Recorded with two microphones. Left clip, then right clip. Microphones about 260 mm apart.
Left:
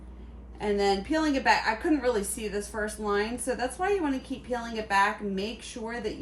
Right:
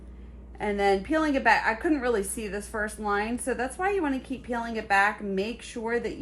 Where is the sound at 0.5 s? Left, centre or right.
Centre.